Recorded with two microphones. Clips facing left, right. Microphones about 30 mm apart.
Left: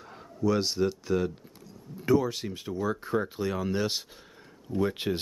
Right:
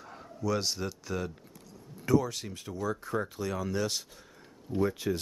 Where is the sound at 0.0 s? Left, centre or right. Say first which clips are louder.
Even; centre.